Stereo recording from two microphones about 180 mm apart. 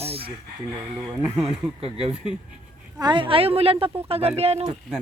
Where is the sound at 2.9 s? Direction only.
25° right (ahead or behind).